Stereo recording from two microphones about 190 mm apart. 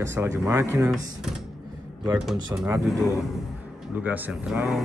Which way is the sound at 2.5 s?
15° right (ahead or behind).